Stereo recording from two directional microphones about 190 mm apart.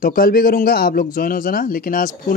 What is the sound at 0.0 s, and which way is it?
Speech, 50° left (ahead or behind).